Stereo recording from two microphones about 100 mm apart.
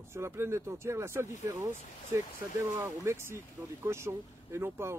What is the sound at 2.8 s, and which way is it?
Speech, 25° right (ahead or behind).